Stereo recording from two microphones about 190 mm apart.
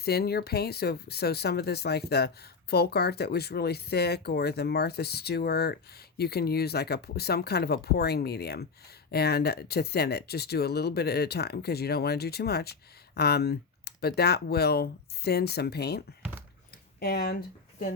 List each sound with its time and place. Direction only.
0.0 s speech: 55° left (ahead or behind)